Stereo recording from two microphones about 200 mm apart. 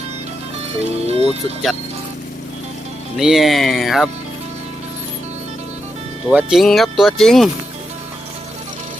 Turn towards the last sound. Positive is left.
turn(degrees=0)  # may be behind; listen again after turning